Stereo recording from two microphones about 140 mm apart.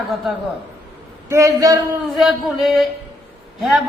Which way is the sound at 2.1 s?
Centre (ahead or behind).